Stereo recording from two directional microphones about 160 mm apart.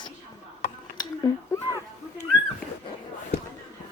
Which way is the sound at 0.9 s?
20° left (ahead or behind).